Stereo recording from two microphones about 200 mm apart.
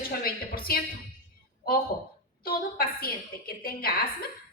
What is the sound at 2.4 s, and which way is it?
A woman's voice, 50° left (ahead or behind).